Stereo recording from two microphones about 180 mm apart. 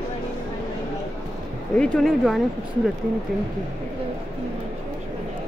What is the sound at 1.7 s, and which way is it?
Speech, 5° left (ahead or behind).